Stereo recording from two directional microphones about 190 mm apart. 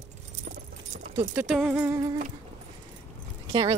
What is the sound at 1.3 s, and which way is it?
Speech, centre (ahead or behind).